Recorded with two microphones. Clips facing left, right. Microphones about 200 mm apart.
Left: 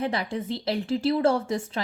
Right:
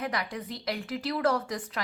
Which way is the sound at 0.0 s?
30° left (ahead or behind).